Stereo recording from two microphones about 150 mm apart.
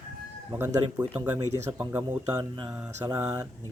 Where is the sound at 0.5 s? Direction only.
20° right (ahead or behind).